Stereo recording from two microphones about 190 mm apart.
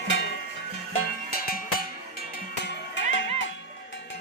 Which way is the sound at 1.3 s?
55° left (ahead or behind).